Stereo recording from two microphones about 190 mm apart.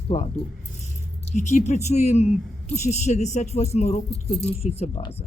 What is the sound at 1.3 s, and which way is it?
Speech, 40° left (ahead or behind).